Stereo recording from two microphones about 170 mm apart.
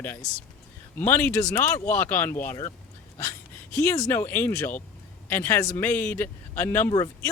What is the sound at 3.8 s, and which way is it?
Speech, 15° left (ahead or behind).